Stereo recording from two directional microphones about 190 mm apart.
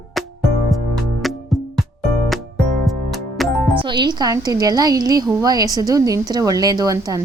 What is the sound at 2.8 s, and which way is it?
Music, centre (ahead or behind).